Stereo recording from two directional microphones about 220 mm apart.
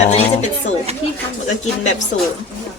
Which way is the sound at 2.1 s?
65° left (ahead or behind).